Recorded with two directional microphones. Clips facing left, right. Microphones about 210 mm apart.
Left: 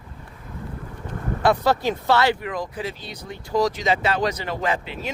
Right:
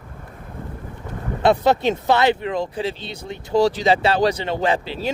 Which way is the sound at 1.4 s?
20° right (ahead or behind).